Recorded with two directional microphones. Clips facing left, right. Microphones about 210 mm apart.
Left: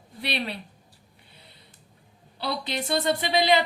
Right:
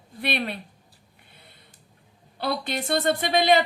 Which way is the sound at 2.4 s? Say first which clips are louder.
Right 2 dB; 50° right (ahead or behind).